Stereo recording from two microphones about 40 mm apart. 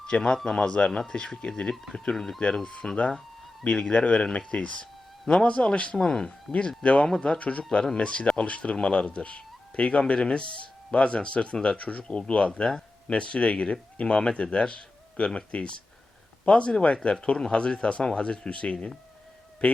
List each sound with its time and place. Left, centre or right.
0.0 s a man's voice: centre
1.7 s speech: centre
2.8 s speech: left
3.7 s speech: left
6.1 s speech: centre
6.5 s speech: left